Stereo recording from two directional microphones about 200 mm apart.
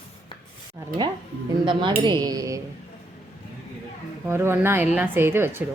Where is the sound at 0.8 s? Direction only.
15° right (ahead or behind).